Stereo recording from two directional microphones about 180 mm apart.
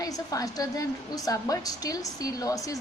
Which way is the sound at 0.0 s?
20° left (ahead or behind).